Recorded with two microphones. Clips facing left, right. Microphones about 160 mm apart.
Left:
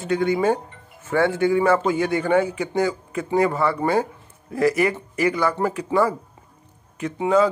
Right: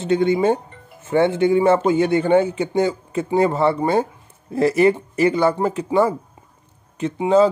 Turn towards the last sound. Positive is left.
turn(degrees=-25)  # may be behind; listen again after turning